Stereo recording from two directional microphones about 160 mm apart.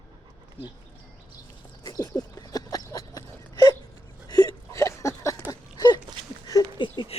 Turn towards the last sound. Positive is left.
turn(degrees=30)  # may be behind; listen again after turning